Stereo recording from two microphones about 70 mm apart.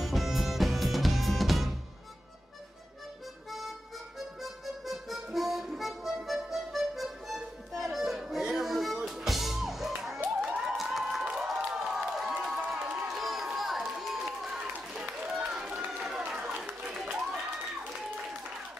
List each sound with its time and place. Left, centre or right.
0.0 s music: centre
3.4 s music: centre
10.4 s a sound: right
10.8 s crowd: centre
13.8 s run: centre
16.0 s a sound: centre